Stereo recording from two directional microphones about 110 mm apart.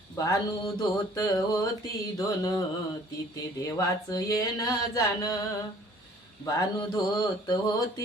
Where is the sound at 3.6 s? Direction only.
30° left (ahead or behind).